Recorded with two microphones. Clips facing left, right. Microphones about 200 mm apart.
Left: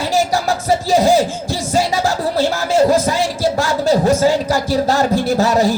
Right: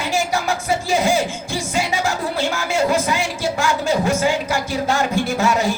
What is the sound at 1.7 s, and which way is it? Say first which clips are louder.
Music: left 5 dB; 35° left (ahead or behind).